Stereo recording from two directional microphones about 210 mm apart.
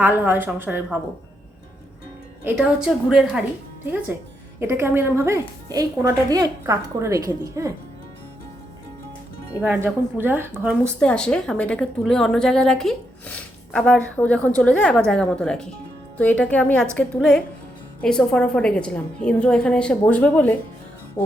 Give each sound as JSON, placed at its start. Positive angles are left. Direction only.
{"t": 0.0, "sound": "a woman's voice", "side_deg": -10}
{"t": 2.4, "sound": "speech", "side_deg": -5}
{"t": 4.6, "sound": "a woman's voice", "side_deg": -10}
{"t": 9.6, "sound": "a woman's voice", "side_deg": -10}
{"t": 10.8, "sound": "speech", "side_deg": 5}